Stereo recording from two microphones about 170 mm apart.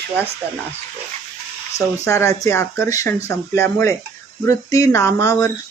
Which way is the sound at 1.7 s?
15° left (ahead or behind).